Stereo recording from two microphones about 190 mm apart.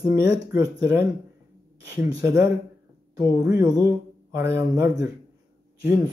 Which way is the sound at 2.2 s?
15° right (ahead or behind).